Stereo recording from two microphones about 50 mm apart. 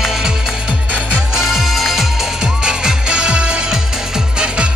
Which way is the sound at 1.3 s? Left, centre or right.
Centre.